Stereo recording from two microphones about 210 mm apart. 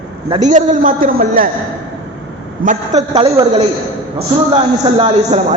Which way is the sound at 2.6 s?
35° right (ahead or behind).